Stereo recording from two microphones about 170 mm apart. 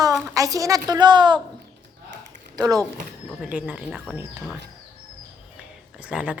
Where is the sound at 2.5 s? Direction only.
20° right (ahead or behind).